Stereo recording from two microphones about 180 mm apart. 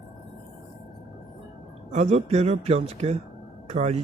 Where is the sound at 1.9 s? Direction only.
40° right (ahead or behind).